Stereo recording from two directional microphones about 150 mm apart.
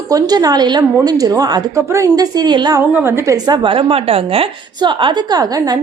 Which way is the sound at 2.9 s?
15° right (ahead or behind).